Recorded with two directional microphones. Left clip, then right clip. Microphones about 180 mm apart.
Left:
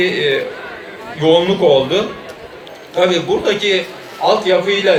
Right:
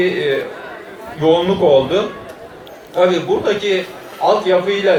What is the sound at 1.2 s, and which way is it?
A man's voice, 35° right (ahead or behind).